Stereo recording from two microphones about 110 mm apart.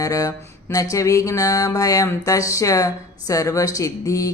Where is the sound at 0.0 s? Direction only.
30° left (ahead or behind).